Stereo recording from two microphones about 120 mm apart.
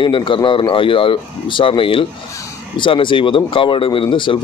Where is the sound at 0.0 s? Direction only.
45° left (ahead or behind).